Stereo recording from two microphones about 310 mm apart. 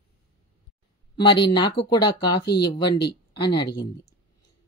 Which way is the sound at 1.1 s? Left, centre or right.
Centre.